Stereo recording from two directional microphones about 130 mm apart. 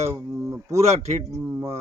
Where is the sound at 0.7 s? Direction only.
55° right (ahead or behind).